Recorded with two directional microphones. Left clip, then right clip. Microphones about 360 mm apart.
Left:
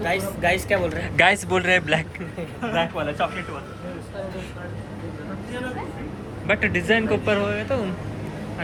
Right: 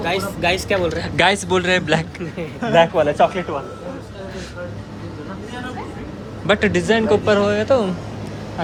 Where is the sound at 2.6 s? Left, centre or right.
Right.